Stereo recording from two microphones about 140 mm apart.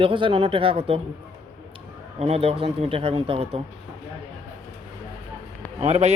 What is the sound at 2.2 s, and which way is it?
A man's voice, 45° right (ahead or behind).